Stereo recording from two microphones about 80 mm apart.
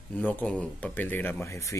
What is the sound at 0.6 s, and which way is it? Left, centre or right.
Speech, left.